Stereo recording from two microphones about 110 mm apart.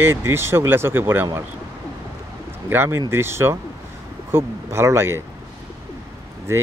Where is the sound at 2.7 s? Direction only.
20° right (ahead or behind).